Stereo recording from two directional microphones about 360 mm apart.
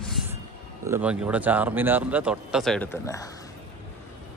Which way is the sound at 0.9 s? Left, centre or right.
Centre.